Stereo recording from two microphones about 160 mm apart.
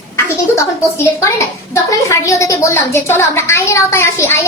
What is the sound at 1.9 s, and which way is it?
A woman's voice, 20° left (ahead or behind).